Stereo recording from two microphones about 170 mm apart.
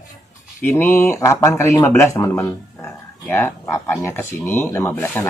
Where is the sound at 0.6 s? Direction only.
10° left (ahead or behind).